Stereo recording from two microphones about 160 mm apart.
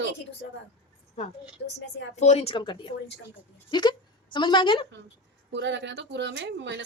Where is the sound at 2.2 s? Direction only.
40° left (ahead or behind).